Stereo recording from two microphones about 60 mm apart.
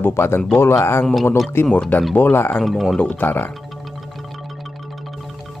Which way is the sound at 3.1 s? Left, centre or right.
Left.